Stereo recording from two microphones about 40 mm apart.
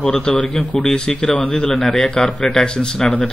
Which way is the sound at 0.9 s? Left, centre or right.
Centre.